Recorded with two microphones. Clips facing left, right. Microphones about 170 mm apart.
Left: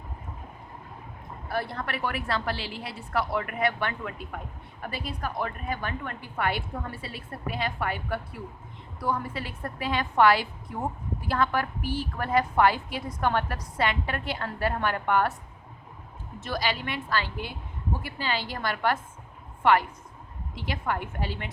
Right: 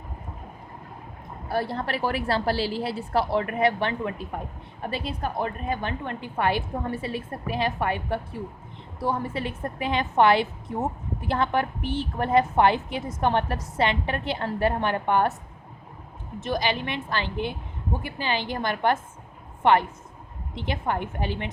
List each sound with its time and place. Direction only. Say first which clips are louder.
1.5 s a woman's voice: right 4 dB; 30° right (ahead or behind)
16.4 s a woman's voice: right 4 dB; 20° right (ahead or behind)